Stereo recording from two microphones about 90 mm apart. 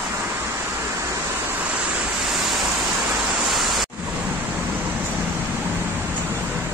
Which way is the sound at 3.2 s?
Centre (ahead or behind).